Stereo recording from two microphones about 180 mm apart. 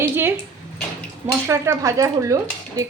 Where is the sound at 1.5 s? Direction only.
15° right (ahead or behind).